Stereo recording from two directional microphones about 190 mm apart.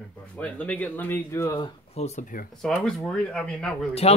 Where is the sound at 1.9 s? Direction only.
35° left (ahead or behind).